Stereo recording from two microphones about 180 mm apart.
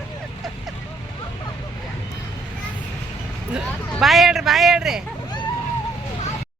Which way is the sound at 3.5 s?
Centre (ahead or behind).